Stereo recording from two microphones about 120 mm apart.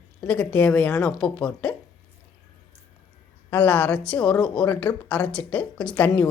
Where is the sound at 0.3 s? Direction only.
10° left (ahead or behind).